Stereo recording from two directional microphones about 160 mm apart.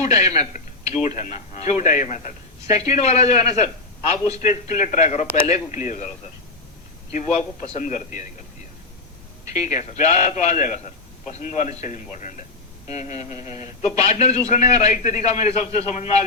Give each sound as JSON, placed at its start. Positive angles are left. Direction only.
{"t": 0.0, "sound": "a man's voice", "side_deg": 45}
{"t": 7.1, "sound": "a man's voice", "side_deg": 45}
{"t": 9.5, "sound": "a man's voice", "side_deg": 45}